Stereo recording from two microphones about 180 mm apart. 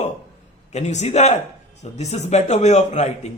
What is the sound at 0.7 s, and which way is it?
A man's voice, 40° left (ahead or behind).